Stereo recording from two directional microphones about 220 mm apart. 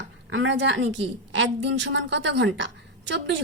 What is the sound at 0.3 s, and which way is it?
A woman's voice, 60° right (ahead or behind).